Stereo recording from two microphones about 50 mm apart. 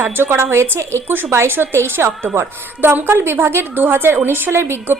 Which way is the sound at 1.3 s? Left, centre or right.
Right.